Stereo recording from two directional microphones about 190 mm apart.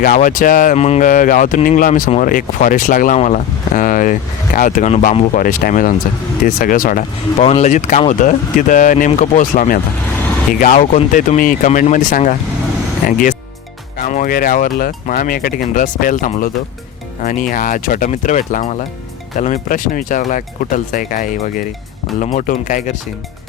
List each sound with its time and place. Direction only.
0.0 s speech: 45° left (ahead or behind)